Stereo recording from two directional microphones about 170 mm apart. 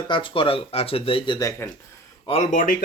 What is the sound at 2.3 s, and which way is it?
Speech, 45° left (ahead or behind).